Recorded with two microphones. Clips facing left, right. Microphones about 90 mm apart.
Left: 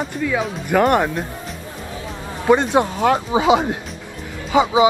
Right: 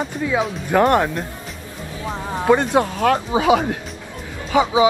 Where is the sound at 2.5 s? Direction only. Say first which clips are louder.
Left 2 dB; 15° left (ahead or behind).